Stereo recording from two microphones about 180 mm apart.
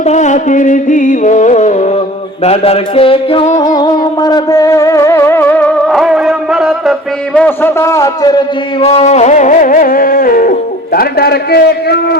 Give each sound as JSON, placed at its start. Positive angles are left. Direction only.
{"t": 0.0, "sound": "music", "side_deg": 40}
{"t": 2.4, "sound": "a man's voice", "side_deg": 35}
{"t": 3.8, "sound": "music", "side_deg": 25}
{"t": 7.3, "sound": "a man's voice", "side_deg": 10}